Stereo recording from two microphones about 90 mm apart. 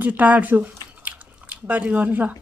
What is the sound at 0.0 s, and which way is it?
Speech, 20° right (ahead or behind).